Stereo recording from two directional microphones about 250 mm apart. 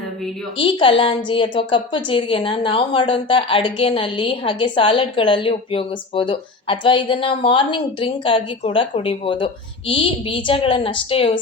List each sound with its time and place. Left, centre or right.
0.5 s a woman's voice: left